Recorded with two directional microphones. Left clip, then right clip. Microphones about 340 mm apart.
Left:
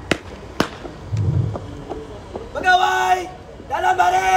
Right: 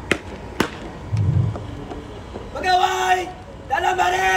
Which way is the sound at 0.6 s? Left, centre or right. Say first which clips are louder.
Left 1 dB; centre.